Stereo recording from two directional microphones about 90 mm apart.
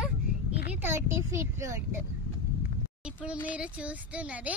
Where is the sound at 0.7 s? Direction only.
25° right (ahead or behind).